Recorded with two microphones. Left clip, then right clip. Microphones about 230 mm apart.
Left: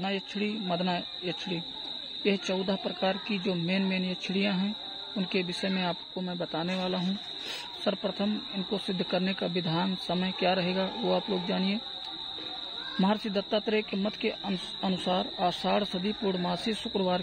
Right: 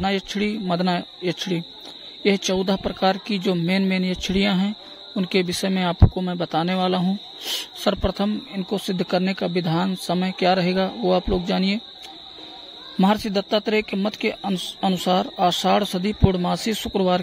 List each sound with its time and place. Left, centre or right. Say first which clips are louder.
0.0 s speech: right 9 dB; right
13.0 s speech: right 9 dB; right